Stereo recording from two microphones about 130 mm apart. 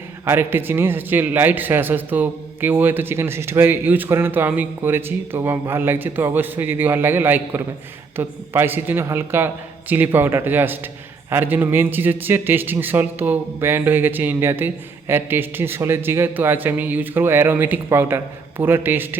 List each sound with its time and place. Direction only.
0.3 s a man's voice: 15° right (ahead or behind)